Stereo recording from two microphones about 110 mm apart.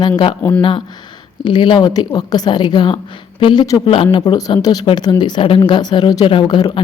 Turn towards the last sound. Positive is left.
turn(degrees=40)  # may be behind; listen again after turning